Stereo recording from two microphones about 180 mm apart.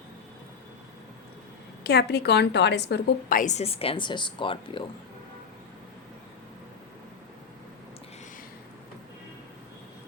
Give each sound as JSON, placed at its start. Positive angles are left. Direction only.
{"t": 1.8, "sound": "a woman's voice", "side_deg": 65}